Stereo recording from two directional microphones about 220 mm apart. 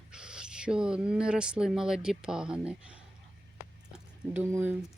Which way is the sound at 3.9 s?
10° right (ahead or behind).